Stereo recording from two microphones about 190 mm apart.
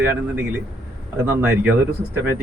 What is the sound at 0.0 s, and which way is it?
A man's voice, 15° right (ahead or behind).